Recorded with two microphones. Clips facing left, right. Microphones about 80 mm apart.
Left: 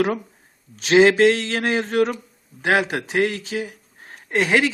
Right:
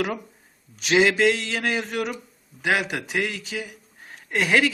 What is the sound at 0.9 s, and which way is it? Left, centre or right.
A man's voice, left.